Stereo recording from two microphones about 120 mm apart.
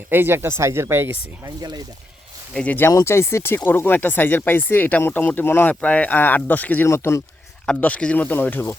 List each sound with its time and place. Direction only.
0.1 s speech: 20° right (ahead or behind)
2.6 s speech: 15° left (ahead or behind)
7.7 s speech: 10° left (ahead or behind)